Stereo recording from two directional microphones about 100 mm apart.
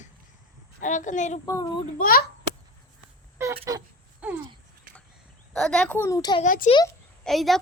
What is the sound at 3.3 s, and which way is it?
Speech, 25° right (ahead or behind).